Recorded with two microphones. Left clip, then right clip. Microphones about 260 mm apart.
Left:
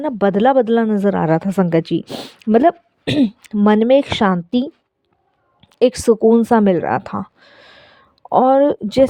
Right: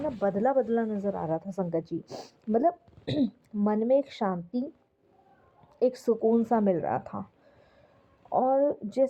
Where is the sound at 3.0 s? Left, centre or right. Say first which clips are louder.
Left 12 dB; left.